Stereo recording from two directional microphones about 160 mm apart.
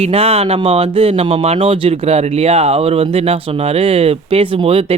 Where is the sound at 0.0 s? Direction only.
40° right (ahead or behind).